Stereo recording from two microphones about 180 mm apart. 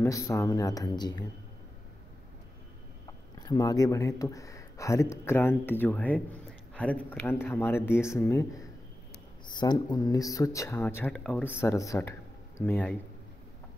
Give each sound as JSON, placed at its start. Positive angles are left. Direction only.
{"t": 0.0, "sound": "speech", "side_deg": 15}
{"t": 3.3, "sound": "speech", "side_deg": 20}
{"t": 11.6, "sound": "speech", "side_deg": 15}